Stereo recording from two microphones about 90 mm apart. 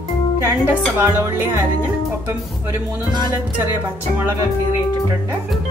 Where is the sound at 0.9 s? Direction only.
25° right (ahead or behind).